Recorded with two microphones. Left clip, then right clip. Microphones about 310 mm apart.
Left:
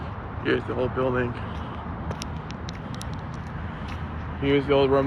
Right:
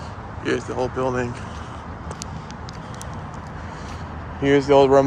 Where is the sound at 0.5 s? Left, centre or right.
Centre.